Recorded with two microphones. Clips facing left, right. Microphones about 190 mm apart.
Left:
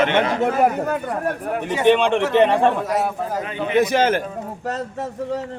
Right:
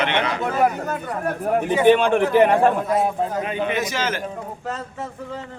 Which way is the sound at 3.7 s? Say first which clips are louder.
Left 7 dB; 60° left (ahead or behind).